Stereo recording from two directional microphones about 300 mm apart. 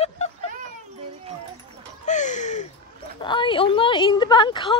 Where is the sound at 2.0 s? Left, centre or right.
Left.